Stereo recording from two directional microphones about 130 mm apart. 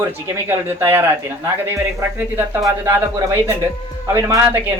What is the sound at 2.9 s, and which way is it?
Speech, 15° right (ahead or behind).